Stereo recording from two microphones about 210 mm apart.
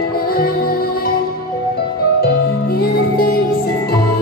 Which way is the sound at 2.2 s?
45° left (ahead or behind).